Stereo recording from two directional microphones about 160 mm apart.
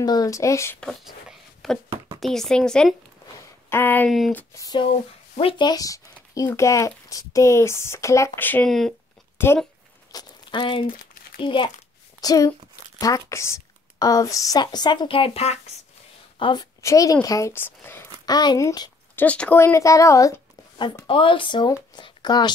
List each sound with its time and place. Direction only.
0.0 s speech: 25° left (ahead or behind)
0.7 s speech: 5° left (ahead or behind)
3.3 s a sound: 15° left (ahead or behind)
4.3 s speech: 10° left (ahead or behind)
4.6 s speech: 30° left (ahead or behind); by 8.9 s centre (ahead or behind)
9.4 s speech: 15° left (ahead or behind)
10.1 s a child's voice: 30° left (ahead or behind)
16.3 s a woman's voice: 30° left (ahead or behind); by 18.3 s 15° left (ahead or behind)
18.3 s speech: 25° left (ahead or behind)
19.2 s speech: 5° left (ahead or behind); by 21.7 s 30° left (ahead or behind)
21.9 s a sound: 25° left (ahead or behind)